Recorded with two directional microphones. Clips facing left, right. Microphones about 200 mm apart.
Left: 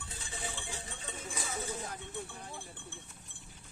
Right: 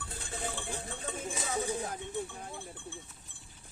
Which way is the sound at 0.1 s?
55° right (ahead or behind).